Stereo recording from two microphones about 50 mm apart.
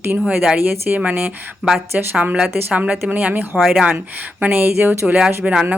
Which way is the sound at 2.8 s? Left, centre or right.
Right.